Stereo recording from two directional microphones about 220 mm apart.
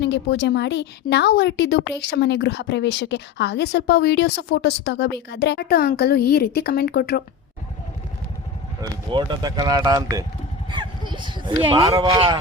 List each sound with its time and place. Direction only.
0.0 s a woman's voice: 50° left (ahead or behind)
9.0 s speech: 20° right (ahead or behind)